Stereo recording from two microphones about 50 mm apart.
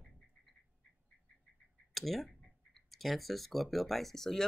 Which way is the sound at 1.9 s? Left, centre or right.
Centre.